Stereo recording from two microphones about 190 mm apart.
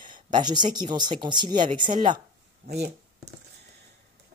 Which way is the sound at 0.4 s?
25° right (ahead or behind).